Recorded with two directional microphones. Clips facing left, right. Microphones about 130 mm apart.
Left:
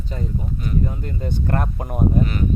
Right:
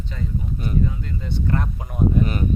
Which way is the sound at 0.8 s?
45° left (ahead or behind).